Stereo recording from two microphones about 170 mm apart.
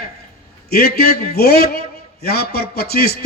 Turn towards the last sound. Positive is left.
turn(degrees=65)  # may be behind; listen again after turning